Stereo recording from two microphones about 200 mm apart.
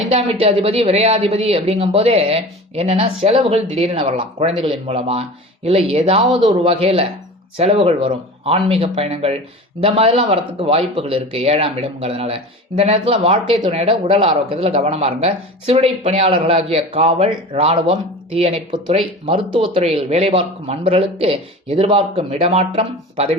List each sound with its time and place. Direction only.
0.1 s speech: 30° right (ahead or behind)